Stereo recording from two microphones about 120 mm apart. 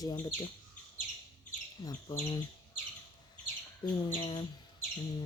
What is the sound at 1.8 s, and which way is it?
Speech, 30° left (ahead or behind).